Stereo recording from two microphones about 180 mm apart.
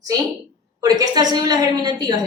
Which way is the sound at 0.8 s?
20° right (ahead or behind).